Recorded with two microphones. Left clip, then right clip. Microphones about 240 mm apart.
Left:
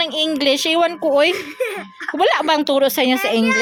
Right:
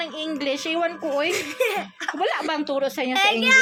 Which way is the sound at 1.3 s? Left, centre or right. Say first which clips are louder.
Even; centre.